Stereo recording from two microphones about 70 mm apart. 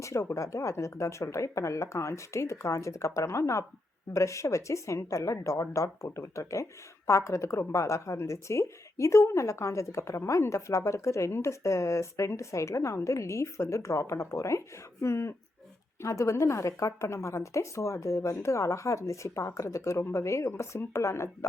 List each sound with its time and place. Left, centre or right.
0.0 s a woman's voice: left